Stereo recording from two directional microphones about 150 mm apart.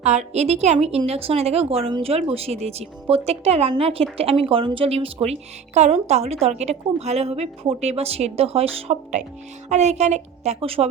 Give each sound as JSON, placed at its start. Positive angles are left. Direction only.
{"t": 0.0, "sound": "a woman's voice", "side_deg": -50}